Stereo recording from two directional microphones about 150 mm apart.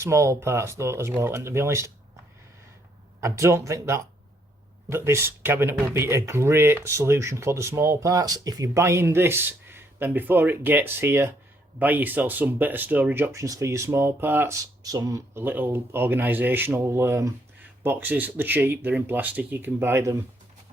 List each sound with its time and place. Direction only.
0.0 s speech: 20° right (ahead or behind)
3.2 s speech: 20° right (ahead or behind)